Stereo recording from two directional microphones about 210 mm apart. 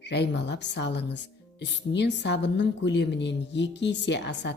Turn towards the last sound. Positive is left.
turn(degrees=55)  # may be behind; listen again after turning